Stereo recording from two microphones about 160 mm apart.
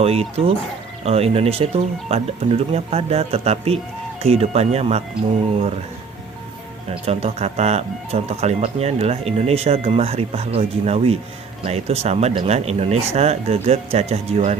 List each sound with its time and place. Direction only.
0.0 s speech: 40° right (ahead or behind)
6.9 s speech: 40° right (ahead or behind)